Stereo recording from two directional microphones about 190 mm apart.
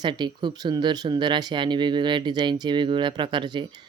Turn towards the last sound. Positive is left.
turn(degrees=-25)  # may be behind; listen again after turning